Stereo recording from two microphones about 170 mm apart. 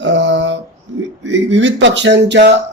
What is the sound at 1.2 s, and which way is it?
Speech, 90° right.